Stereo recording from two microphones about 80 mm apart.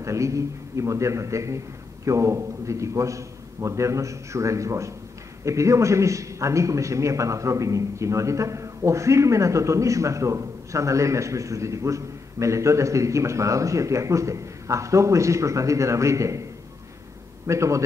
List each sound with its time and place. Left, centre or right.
0.0 s a man's voice: right
17.5 s a man's voice: right